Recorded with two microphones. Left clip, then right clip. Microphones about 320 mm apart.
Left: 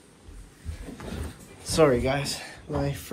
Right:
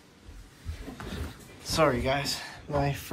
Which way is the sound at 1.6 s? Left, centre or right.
Centre.